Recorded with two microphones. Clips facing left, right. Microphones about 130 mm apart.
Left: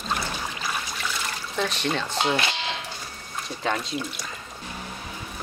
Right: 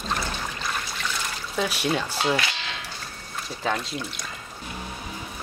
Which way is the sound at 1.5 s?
10° right (ahead or behind).